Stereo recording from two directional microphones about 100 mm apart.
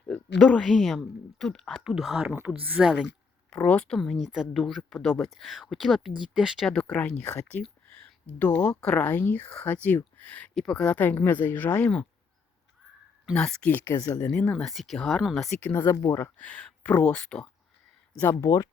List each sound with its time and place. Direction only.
0.1 s speech: 10° left (ahead or behind)
2.3 s a woman's voice: 20° right (ahead or behind)
3.5 s speech: 10° left (ahead or behind)
6.8 s speech: 15° left (ahead or behind)
10.9 s speech: 15° left (ahead or behind)
13.3 s speech: 5° left (ahead or behind)
13.7 s speech: 20° left (ahead or behind)
14.5 s speech: centre (ahead or behind)
15.4 s speech: 15° left (ahead or behind)
16.5 s a sound: 10° left (ahead or behind)
16.9 s speech: 15° left (ahead or behind)
18.2 s speech: 25° left (ahead or behind)